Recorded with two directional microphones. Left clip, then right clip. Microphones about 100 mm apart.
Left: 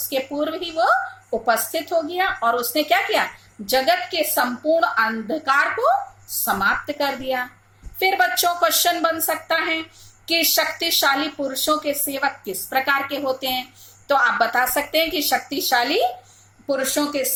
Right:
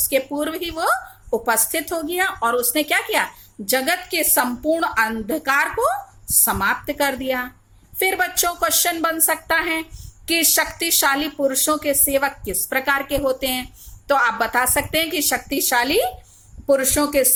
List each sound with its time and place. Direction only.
0.1 s a woman's voice: 30° right (ahead or behind)